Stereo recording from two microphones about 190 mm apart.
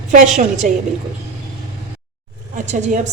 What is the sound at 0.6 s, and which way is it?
Speech, 40° right (ahead or behind).